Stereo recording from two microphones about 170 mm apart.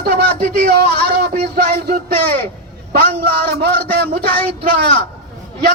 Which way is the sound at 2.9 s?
65° right (ahead or behind).